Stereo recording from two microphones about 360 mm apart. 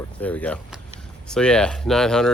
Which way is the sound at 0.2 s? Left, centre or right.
Centre.